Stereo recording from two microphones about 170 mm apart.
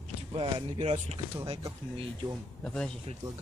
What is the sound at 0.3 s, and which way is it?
Speech, 30° right (ahead or behind).